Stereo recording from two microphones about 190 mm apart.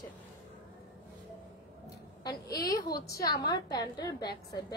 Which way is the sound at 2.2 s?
20° left (ahead or behind).